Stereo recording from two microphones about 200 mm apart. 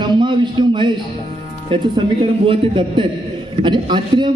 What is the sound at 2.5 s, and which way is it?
A man's voice, 25° right (ahead or behind).